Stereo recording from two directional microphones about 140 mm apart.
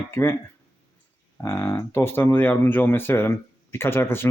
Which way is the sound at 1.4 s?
20° left (ahead or behind).